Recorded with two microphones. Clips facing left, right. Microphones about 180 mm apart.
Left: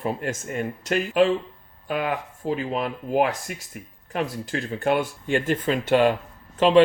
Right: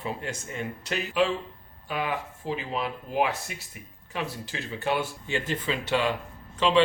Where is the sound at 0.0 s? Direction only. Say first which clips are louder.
Left 6 dB; 50° left (ahead or behind).